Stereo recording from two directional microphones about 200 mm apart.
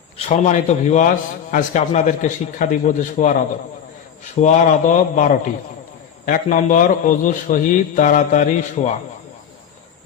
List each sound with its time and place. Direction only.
0.2 s a man's voice: 35° left (ahead or behind)